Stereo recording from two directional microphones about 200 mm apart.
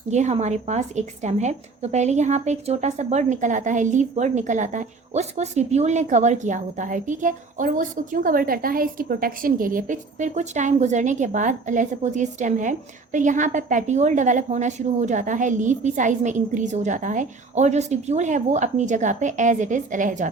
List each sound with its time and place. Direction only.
0.1 s a woman's voice: 35° right (ahead or behind)